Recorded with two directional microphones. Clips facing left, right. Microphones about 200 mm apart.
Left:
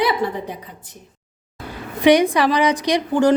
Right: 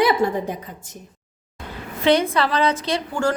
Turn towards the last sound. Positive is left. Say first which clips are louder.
# left 6 dB
turn(degrees=15)  # may be behind; listen again after turning